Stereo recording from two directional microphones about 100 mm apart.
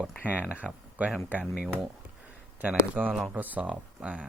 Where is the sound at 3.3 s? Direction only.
15° right (ahead or behind).